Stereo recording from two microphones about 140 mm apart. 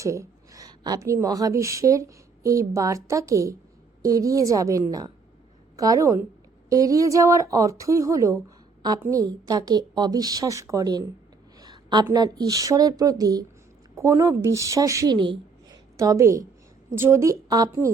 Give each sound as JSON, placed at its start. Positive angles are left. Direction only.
{"t": 0.0, "sound": "a woman's voice", "side_deg": -20}
{"t": 11.6, "sound": "a sound", "side_deg": -30}
{"t": 12.1, "sound": "a woman's voice", "side_deg": -30}
{"t": 16.0, "sound": "a woman's voice", "side_deg": -20}